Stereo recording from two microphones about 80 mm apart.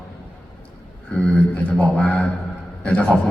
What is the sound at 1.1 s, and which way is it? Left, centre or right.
A man's voice, centre.